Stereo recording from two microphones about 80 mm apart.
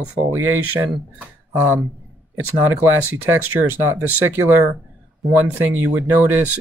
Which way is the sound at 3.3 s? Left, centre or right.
Right.